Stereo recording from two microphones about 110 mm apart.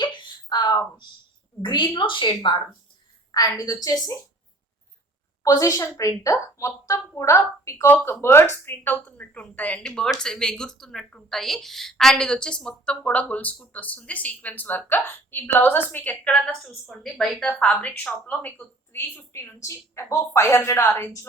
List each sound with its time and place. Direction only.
0.0 s a sound: 45° left (ahead or behind)
1.6 s a woman's voice: 45° left (ahead or behind)
3.3 s a woman's voice: 35° left (ahead or behind)
5.4 s a woman's voice: 30° left (ahead or behind); by 16.4 s 15° left (ahead or behind)
16.9 s a woman's voice: 5° left (ahead or behind)
17.6 s a woman's voice: 10° left (ahead or behind)